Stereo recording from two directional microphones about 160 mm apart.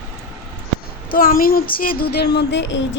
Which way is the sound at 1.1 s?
60° left (ahead or behind).